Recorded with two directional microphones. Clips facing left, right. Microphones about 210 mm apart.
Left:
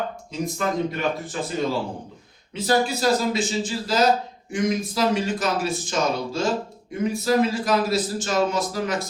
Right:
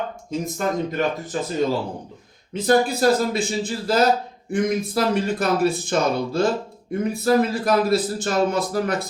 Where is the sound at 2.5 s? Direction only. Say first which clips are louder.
Right 3 dB; 55° right (ahead or behind).